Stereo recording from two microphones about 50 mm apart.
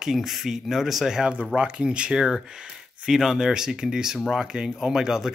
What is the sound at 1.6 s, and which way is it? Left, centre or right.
Speech, centre.